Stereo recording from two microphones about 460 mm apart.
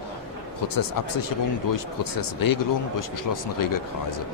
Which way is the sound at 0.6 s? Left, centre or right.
Left.